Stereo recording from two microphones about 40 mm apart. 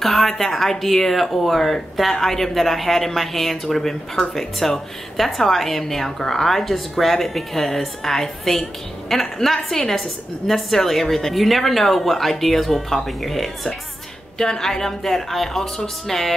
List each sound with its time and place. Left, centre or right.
0.0 s speech: centre